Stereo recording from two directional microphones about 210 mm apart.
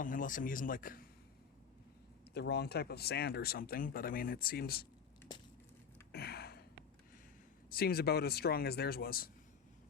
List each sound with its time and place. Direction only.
0.0 s a man's voice: 40° left (ahead or behind)
2.3 s speech: 50° left (ahead or behind)
6.1 s a sound: 50° left (ahead or behind)
7.7 s speech: 45° left (ahead or behind)